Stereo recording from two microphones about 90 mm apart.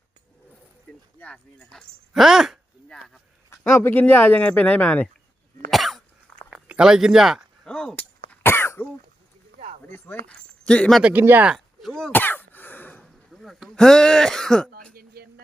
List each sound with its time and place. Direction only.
1.2 s speech: 10° left (ahead or behind)
2.1 s speech: 5° right (ahead or behind)
3.6 s speech: 25° left (ahead or behind)
5.7 s cough: centre (ahead or behind)
6.5 s speech: 10° right (ahead or behind)
7.6 s cap gun: 10° left (ahead or behind)
8.4 s cough: 25° left (ahead or behind)
9.8 s speech: 20° left (ahead or behind)
11.0 s speech: 20° right (ahead or behind)
11.4 s a sound: centre (ahead or behind)
12.1 s cough: 20° left (ahead or behind)
13.0 s throat clearing: 5° left (ahead or behind)